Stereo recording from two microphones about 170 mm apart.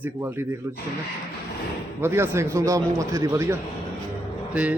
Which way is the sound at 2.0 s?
15° right (ahead or behind).